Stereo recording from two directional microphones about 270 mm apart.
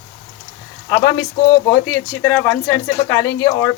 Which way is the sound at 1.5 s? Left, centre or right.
Centre.